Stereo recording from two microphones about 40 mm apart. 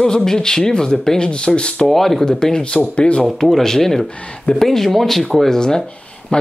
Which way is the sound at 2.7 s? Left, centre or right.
Left.